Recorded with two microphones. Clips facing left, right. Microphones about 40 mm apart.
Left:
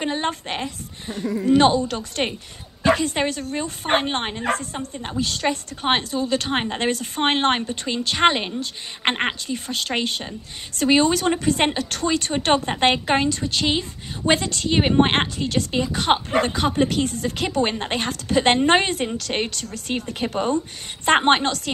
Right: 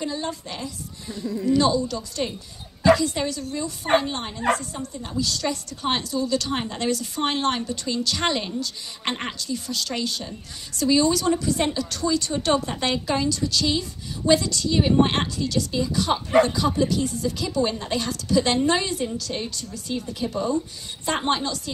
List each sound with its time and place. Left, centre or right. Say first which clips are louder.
0.0 s a woman's voice: left 4 dB; left
4.4 s a woman's voice: right 1 dB; left